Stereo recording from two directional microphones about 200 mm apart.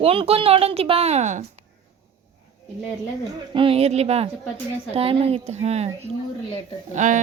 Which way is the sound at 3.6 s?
30° right (ahead or behind).